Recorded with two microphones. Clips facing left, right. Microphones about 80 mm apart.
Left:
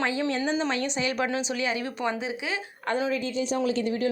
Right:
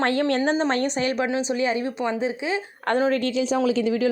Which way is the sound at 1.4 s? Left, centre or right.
Right.